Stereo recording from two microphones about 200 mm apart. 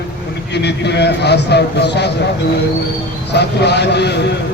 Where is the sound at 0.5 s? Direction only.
55° left (ahead or behind).